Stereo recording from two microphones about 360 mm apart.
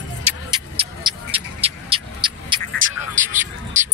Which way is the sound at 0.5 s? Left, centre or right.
Centre.